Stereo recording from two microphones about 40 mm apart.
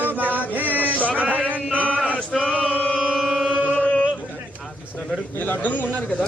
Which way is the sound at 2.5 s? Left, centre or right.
Right.